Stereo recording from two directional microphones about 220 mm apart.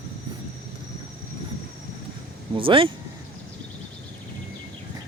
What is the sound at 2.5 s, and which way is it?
Speech, 25° right (ahead or behind).